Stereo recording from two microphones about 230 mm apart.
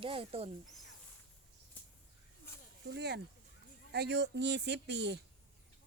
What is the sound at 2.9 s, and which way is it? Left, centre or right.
Speech, right.